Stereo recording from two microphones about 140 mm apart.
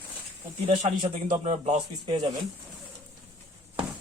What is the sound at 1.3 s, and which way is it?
Speech, 55° right (ahead or behind).